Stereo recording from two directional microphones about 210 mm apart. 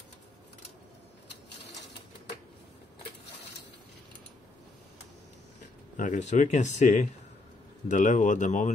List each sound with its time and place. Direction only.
5.9 s speech: 35° left (ahead or behind)